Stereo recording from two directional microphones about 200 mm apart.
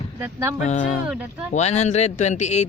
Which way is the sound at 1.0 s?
5° right (ahead or behind).